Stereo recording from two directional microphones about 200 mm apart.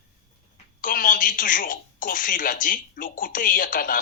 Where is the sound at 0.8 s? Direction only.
45° left (ahead or behind).